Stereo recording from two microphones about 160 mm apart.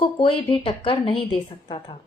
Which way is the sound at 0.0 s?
35° left (ahead or behind).